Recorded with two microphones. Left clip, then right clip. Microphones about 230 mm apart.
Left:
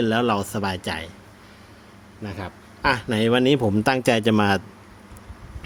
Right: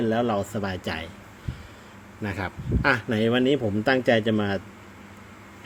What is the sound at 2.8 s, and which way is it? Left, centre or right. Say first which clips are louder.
A man's voice: left 2 dB; centre.